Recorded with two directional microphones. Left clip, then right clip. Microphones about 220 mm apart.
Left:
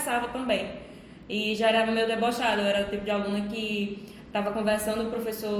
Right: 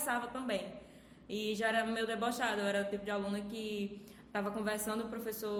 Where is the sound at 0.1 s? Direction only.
45° right (ahead or behind).